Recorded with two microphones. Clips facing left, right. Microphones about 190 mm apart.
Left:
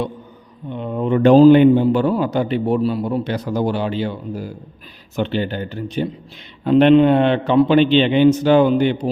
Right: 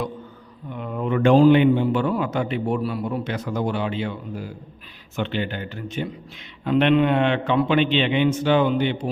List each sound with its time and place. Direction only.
0.7 s a man's voice: 25° left (ahead or behind)